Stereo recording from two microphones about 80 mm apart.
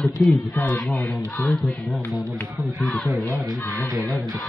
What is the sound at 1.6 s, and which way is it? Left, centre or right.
Speech, centre.